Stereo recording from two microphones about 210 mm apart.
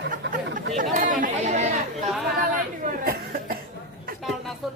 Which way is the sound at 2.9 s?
40° right (ahead or behind).